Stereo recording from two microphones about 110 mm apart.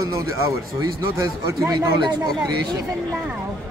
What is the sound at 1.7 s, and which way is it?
Speech, 40° right (ahead or behind).